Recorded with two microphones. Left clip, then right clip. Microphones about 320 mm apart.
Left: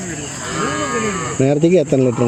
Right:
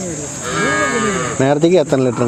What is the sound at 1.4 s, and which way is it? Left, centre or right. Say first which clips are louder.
Speech: right 1 dB; right.